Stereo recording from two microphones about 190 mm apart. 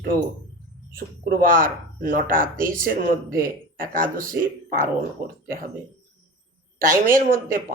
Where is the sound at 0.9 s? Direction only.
50° right (ahead or behind).